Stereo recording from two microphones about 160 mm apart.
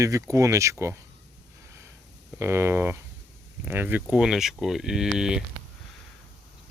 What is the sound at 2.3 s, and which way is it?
Speech, 15° right (ahead or behind).